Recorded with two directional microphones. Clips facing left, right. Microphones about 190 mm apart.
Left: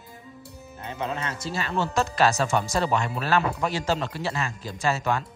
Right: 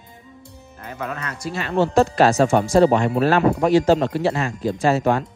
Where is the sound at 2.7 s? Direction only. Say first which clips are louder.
Right 10 dB; 40° right (ahead or behind).